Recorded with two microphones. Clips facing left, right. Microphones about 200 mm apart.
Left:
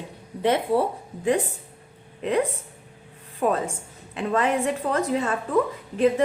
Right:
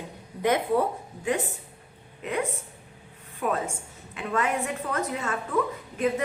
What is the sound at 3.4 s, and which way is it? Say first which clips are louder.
A woman's voice: left 4 dB; 35° left (ahead or behind).